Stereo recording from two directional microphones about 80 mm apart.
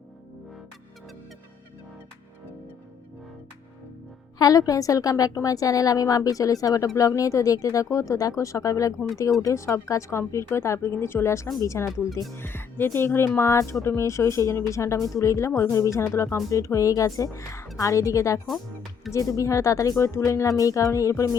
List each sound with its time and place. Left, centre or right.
4.4 s a woman's voice: left
12.4 s speech: left